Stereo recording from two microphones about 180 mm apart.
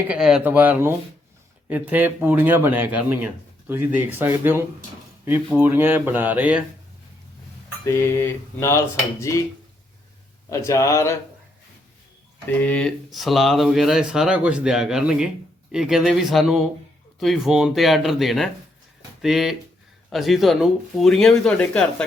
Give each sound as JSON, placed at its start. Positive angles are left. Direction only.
{"t": 0.1, "sound": "speech", "side_deg": -5}
{"t": 7.9, "sound": "mantra", "side_deg": 15}
{"t": 10.5, "sound": "mantra", "side_deg": 15}
{"t": 12.5, "sound": "speech", "side_deg": 5}